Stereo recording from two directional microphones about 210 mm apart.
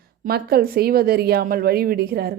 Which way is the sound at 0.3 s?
45° right (ahead or behind).